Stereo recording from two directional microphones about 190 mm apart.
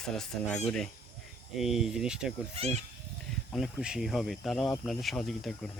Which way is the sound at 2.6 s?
35° right (ahead or behind).